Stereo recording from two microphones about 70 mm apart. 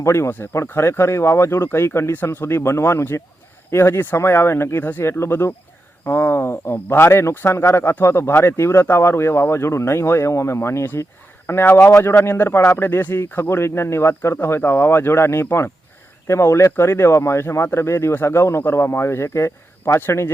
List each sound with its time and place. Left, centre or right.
0.0 s speech: left